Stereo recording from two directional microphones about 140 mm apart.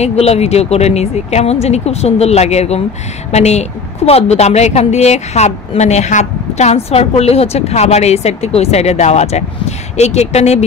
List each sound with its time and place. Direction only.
0.0 s a woman's voice: 50° left (ahead or behind)